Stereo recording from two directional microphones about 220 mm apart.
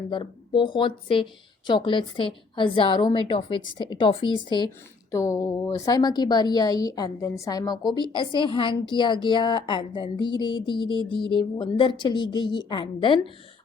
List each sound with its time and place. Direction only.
0.1 s a woman's voice: 20° left (ahead or behind)